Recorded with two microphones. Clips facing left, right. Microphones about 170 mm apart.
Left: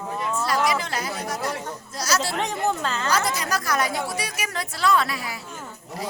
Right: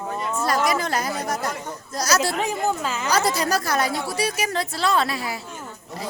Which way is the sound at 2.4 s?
5° right (ahead or behind).